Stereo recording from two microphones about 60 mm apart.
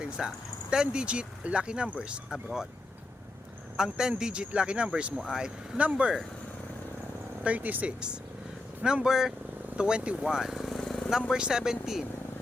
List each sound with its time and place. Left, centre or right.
0.2 s speech: centre
3.8 s speech: centre
5.7 s speech: right
7.4 s speech: right; by 11.1 s centre
11.3 s speech: centre